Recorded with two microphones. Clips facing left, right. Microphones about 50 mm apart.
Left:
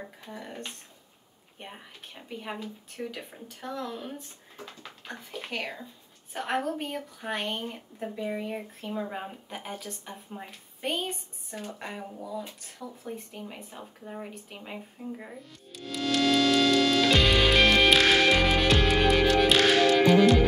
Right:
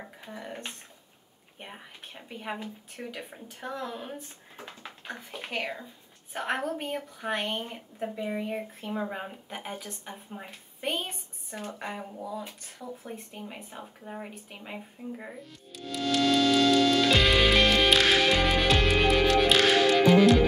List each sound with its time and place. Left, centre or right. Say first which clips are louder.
0.0 s a woman's voice: even; centre
1.6 s a woman's voice: even; centre
3.4 s a woman's voice: left 1 dB; right; by 12.5 s centre
12.7 s speech: left 1 dB; right
13.1 s a woman's voice: left 1 dB; centre
15.8 s music: even; centre